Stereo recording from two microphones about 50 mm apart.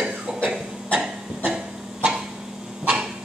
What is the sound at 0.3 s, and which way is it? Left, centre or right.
Cough, centre.